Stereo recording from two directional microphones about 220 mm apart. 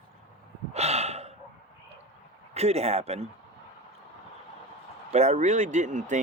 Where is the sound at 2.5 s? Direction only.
30° right (ahead or behind).